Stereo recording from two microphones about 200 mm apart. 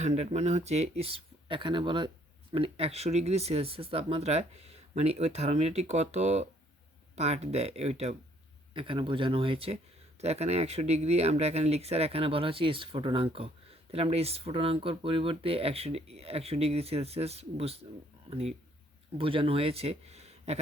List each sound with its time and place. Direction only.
0.0 s speech: 35° right (ahead or behind)